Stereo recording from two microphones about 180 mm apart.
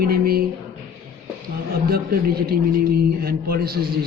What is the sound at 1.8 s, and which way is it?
A man's voice, 55° right (ahead or behind).